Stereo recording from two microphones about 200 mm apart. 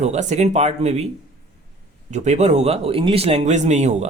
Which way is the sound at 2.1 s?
35° right (ahead or behind).